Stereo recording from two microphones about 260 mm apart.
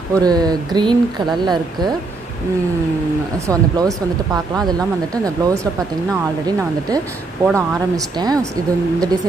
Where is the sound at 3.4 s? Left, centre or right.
Centre.